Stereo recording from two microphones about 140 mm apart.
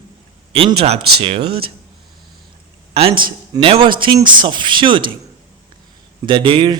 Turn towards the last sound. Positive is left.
turn(degrees=-35)  # may be behind; listen again after turning